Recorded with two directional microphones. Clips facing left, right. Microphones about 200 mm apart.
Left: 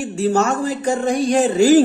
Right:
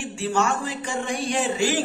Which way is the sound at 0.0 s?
40° left (ahead or behind).